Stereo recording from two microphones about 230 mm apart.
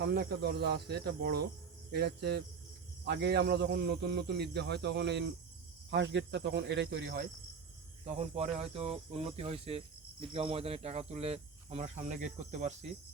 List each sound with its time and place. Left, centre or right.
0.0 s speech: right
8.0 s speech: right